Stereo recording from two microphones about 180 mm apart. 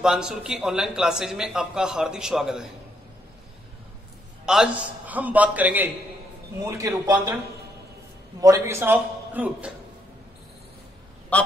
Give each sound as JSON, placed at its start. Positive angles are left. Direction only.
{"t": 0.0, "sound": "a man's voice", "side_deg": -5}
{"t": 4.5, "sound": "a man's voice", "side_deg": -5}
{"t": 6.6, "sound": "a man's voice", "side_deg": -20}
{"t": 8.4, "sound": "a man's voice", "side_deg": -15}
{"t": 11.3, "sound": "speech", "side_deg": 10}